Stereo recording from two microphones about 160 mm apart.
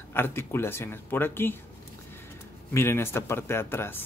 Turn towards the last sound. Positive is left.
turn(degrees=15)  # may be behind; listen again after turning